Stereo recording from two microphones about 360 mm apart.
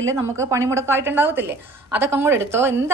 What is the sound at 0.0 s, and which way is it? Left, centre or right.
A woman's voice, centre.